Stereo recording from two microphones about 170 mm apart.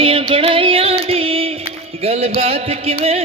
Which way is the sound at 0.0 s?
35° right (ahead or behind).